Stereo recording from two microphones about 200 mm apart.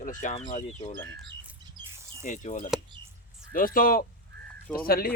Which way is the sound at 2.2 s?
40° left (ahead or behind).